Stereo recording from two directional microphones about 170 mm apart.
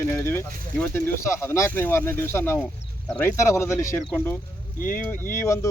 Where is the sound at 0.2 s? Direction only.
15° left (ahead or behind).